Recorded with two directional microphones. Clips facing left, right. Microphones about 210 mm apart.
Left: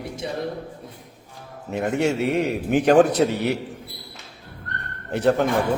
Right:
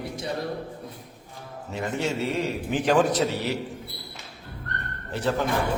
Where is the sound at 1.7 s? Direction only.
60° left (ahead or behind).